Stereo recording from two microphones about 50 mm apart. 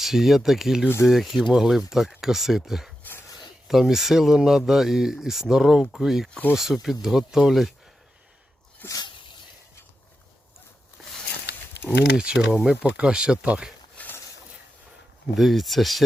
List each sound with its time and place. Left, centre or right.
0.0 s speech: centre
3.0 s a sound: left
3.7 s speech: centre
12.1 s speech: centre
14.0 s a sound: left
15.4 s speech: centre